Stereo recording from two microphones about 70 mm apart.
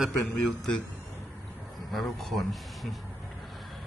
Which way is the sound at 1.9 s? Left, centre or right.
Centre.